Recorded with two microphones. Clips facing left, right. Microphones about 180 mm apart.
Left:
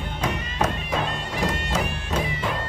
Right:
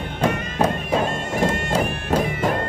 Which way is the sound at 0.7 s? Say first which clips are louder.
Right 5 dB; 50° right (ahead or behind).